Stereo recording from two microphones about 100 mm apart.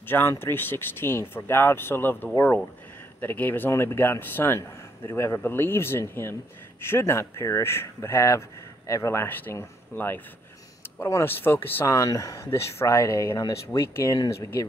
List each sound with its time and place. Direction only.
0.0 s speech: 20° left (ahead or behind)